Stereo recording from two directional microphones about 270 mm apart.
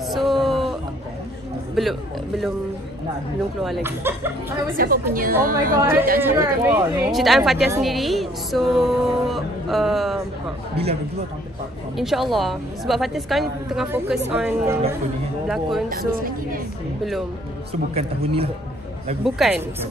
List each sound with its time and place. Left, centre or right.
0.1 s music: centre
1.8 s a woman's voice: centre
3.6 s speech: centre
4.7 s a woman's voice: right
5.8 s a woman's voice: centre
12.0 s a woman's voice: centre
15.9 s a woman's voice: right
17.9 s speech: right
19.2 s a woman's voice: centre